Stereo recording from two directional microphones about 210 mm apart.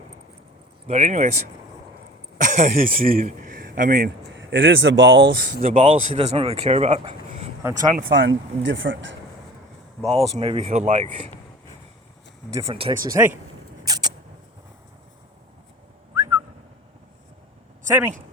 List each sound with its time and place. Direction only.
0.9 s speech: 30° right (ahead or behind)
2.4 s speech: 35° right (ahead or behind)
4.4 s speech: 60° right (ahead or behind); by 7.4 s 30° right (ahead or behind)
7.6 s speech: 15° right (ahead or behind)
7.9 s speech: 40° right (ahead or behind)
8.2 s speech: 60° right (ahead or behind)
10.1 s speech: 30° right (ahead or behind)
12.5 s speech: 20° right (ahead or behind)
13.8 s rodents: 20° right (ahead or behind)
16.1 s whistling: 15° right (ahead or behind)
17.8 s speech: 10° right (ahead or behind)